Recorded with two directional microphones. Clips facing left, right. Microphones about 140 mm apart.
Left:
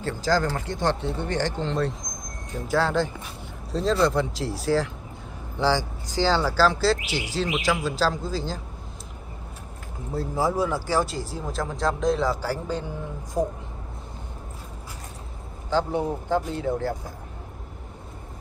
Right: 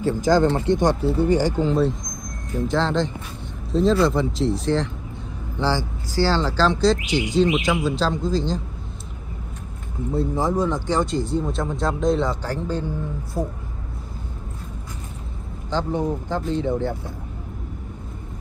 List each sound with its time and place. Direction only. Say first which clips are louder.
0.0 s speech: right 6 dB; 15° right (ahead or behind)
1.0 s speech: right 8 dB; 5° right (ahead or behind)
2.7 s speech: even; 10° left (ahead or behind)
5.6 s speech: even; 15° left (ahead or behind)
10.1 s speech: right 3 dB; 5° left (ahead or behind)
15.7 s speech: right 1 dB; 10° left (ahead or behind)